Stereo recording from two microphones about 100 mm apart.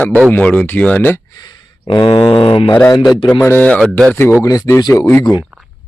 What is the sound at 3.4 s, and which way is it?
Speech, 15° left (ahead or behind).